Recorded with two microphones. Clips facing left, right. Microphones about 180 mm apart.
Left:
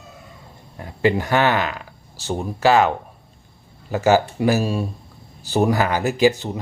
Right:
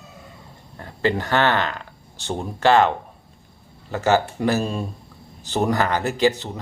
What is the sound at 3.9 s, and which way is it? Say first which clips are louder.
A man's voice: left 3 dB; 10° left (ahead or behind).